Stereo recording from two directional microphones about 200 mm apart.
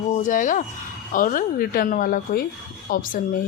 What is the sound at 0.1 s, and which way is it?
A woman's voice, 40° left (ahead or behind).